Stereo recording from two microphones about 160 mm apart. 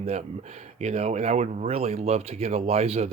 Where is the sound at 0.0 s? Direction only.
45° right (ahead or behind).